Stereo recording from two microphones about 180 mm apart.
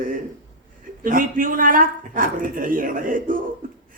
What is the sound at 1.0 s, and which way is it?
A man's voice, 50° right (ahead or behind).